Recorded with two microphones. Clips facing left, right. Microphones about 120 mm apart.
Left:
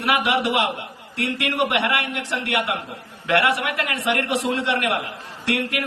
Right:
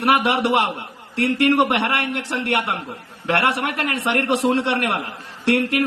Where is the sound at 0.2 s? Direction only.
30° right (ahead or behind).